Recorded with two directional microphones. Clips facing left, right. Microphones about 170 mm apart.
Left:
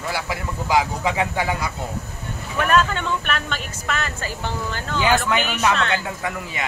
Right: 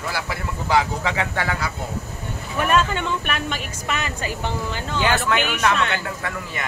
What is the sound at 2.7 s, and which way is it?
Speech, 10° right (ahead or behind).